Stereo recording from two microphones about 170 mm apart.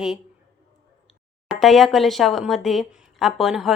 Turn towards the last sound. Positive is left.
turn(degrees=0)  # may be behind; listen again after turning